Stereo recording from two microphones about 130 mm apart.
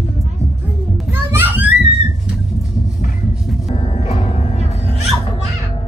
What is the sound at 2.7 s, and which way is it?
Music, 75° left (ahead or behind).